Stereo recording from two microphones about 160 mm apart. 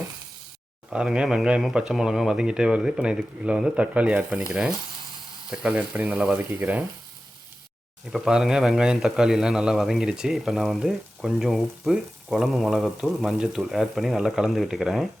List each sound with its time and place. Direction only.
0.9 s a man's voice: 5° right (ahead or behind)
5.5 s speech: 5° right (ahead or behind)
8.1 s a man's voice: centre (ahead or behind)